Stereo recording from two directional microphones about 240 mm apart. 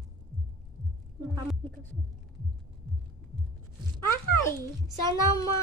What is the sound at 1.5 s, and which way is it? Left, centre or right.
Speech, centre.